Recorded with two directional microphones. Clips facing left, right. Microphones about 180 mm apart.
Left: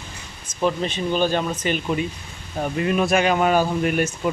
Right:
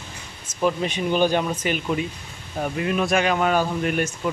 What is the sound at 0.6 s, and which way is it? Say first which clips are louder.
Speech: even; 10° right (ahead or behind).